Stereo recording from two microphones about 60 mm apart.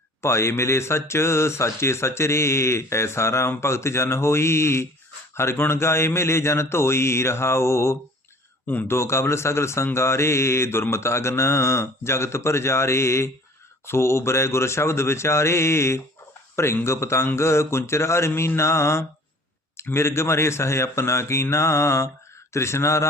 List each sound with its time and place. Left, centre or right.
0.2 s speech: left
8.6 s speech: left
8.9 s speech: left